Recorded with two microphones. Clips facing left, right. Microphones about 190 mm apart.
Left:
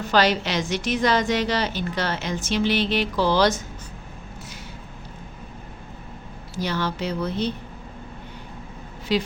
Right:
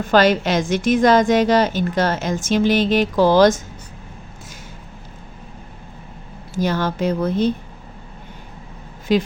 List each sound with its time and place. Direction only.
0.0 s a woman's voice: 50° right (ahead or behind)
6.5 s a woman's voice: 50° right (ahead or behind)
9.1 s a woman's voice: 50° right (ahead or behind)